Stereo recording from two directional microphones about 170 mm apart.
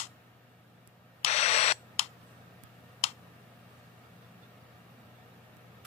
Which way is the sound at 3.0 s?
40° left (ahead or behind).